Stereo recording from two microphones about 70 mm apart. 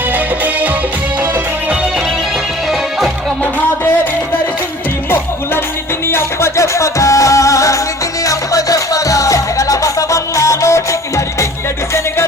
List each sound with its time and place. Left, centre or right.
6.1 s music: left